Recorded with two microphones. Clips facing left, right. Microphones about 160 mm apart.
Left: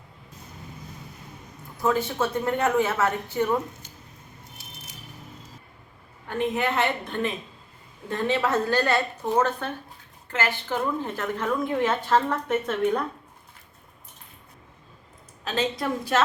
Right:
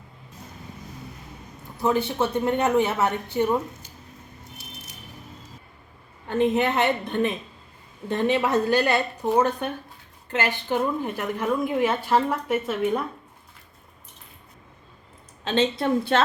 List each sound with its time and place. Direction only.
2.1 s a woman's voice: 20° right (ahead or behind)
6.2 s a woman's voice: 20° right (ahead or behind)
15.4 s a woman's voice: 25° right (ahead or behind)